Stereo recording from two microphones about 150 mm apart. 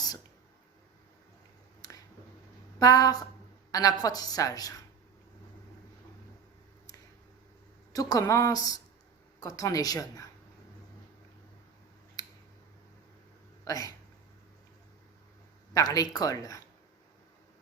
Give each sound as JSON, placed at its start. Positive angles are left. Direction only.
{"t": 1.8, "sound": "a sound", "side_deg": 25}
{"t": 2.7, "sound": "a woman's voice", "side_deg": 25}
{"t": 7.9, "sound": "a woman's voice", "side_deg": 25}
{"t": 13.7, "sound": "speech", "side_deg": 20}
{"t": 15.7, "sound": "a woman's voice", "side_deg": 25}